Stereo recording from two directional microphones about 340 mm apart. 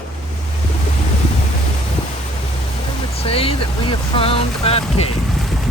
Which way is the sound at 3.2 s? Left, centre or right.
Centre.